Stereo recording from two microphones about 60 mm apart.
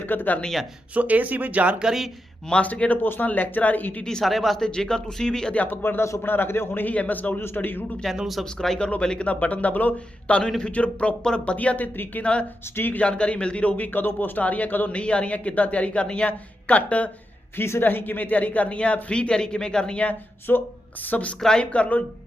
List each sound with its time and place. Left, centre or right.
0.0 s speech: left
0.9 s speech: right
1.8 s speech: centre
2.5 s a man's voice: centre
4.0 s speech: centre
5.7 s a man's voice: left
6.8 s a man's voice: left
8.1 s a man's voice: centre
12.7 s a man's voice: left
13.0 s a man's voice: centre
17.6 s a man's voice: left; by 20.1 s centre
20.5 s a man's voice: left